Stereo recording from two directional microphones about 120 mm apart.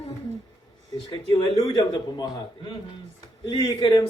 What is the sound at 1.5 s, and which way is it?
A man's voice, 35° left (ahead or behind).